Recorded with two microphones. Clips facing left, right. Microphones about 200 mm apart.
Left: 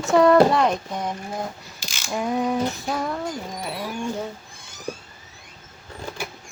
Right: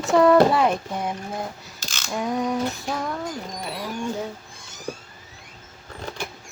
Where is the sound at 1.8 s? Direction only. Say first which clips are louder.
Left 1 dB; 10° left (ahead or behind).